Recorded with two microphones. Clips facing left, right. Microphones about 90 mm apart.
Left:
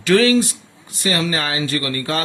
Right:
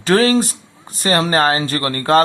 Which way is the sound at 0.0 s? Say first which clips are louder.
Right 1 dB; 40° right (ahead or behind).